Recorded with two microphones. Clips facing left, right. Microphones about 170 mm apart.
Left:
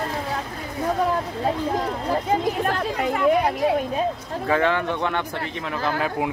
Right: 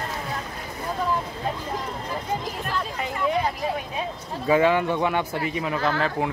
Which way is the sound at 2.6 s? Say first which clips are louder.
Left 6 dB; 60° left (ahead or behind).